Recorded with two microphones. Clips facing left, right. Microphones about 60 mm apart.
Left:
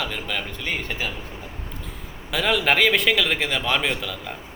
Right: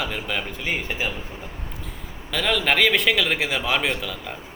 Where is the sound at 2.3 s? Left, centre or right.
Centre.